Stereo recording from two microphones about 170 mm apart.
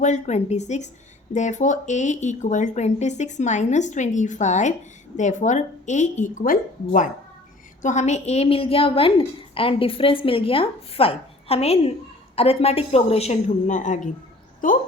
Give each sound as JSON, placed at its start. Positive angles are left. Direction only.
{"t": 0.0, "sound": "a woman's voice", "side_deg": 45}